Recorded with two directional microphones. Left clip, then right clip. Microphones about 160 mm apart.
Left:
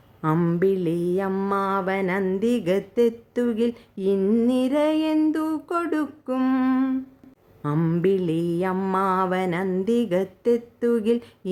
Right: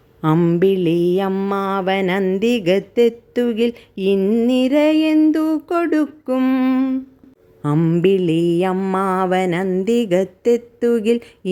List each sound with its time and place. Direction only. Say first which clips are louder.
0.2 s mantra: right 6 dB; 20° right (ahead or behind)